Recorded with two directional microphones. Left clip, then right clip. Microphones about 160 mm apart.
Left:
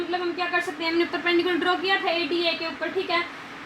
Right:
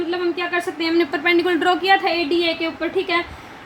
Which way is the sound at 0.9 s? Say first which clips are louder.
Right 6 dB; 50° right (ahead or behind).